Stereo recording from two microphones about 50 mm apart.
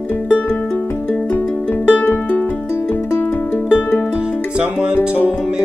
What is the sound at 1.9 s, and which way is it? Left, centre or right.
Music, left.